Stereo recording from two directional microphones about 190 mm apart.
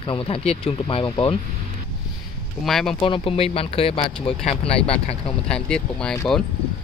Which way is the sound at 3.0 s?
25° left (ahead or behind).